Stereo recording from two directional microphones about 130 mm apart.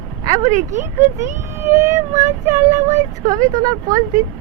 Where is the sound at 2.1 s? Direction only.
65° right (ahead or behind).